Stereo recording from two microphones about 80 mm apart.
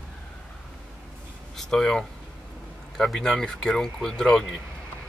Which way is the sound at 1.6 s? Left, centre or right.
Centre.